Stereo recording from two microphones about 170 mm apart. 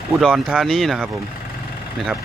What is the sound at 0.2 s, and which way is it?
Speech, 5° left (ahead or behind).